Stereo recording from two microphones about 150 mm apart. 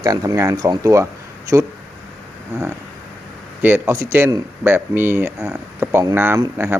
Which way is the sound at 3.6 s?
15° right (ahead or behind).